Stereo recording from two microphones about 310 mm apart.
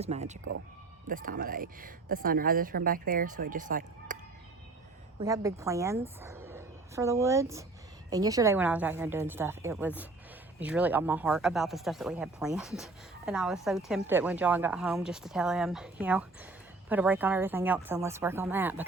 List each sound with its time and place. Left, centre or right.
0.0 s speech: right
5.2 s speech: centre